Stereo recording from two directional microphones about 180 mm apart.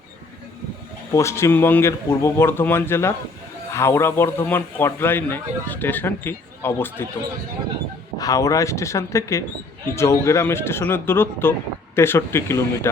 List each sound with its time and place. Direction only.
1.1 s speech: 15° left (ahead or behind)
8.2 s speech: 20° left (ahead or behind)